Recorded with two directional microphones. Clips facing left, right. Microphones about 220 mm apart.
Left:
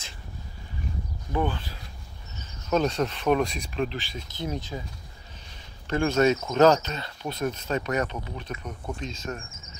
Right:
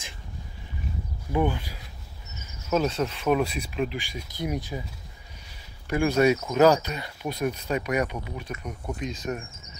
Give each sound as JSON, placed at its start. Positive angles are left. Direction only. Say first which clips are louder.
{"t": 1.3, "sound": "speech", "louder": "right 2 dB", "side_deg": -15}
{"t": 5.9, "sound": "speech", "louder": "right 1 dB", "side_deg": -10}